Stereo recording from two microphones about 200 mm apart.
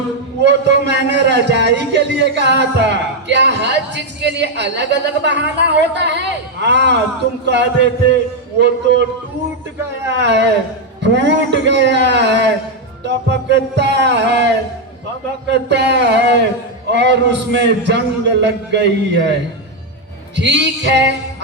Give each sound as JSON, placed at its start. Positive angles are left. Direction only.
{"t": 0.4, "sound": "a man's voice", "side_deg": -60}
{"t": 10.2, "sound": "a man's voice", "side_deg": -60}
{"t": 15.4, "sound": "a man's voice", "side_deg": -60}
{"t": 20.3, "sound": "a man's voice", "side_deg": -60}